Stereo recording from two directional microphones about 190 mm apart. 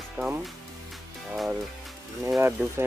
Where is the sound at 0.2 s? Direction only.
10° right (ahead or behind).